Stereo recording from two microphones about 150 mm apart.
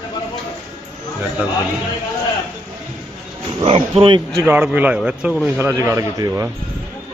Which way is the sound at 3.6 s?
40° right (ahead or behind).